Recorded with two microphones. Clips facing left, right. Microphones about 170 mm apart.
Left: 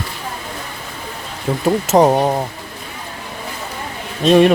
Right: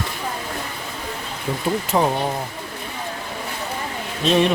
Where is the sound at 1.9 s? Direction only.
40° left (ahead or behind).